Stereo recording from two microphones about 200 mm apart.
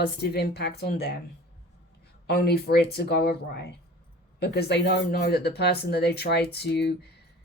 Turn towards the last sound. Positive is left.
turn(degrees=55)  # may be behind; listen again after turning